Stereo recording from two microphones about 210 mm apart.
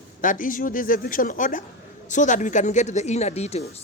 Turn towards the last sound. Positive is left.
turn(degrees=30)  # may be behind; listen again after turning